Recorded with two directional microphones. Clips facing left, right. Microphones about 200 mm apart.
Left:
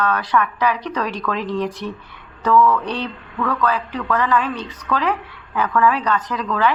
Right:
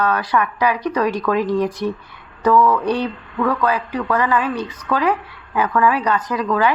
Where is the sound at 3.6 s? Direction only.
15° right (ahead or behind).